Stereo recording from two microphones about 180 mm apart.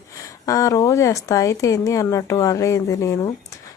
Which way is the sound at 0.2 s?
20° left (ahead or behind).